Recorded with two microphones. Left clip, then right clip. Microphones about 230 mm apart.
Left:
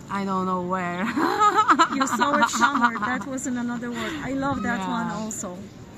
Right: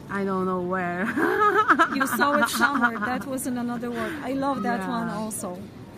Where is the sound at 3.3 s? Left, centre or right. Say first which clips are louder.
Even; centre.